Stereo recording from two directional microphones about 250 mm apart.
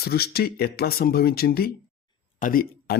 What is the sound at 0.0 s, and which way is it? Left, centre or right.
Speech, left.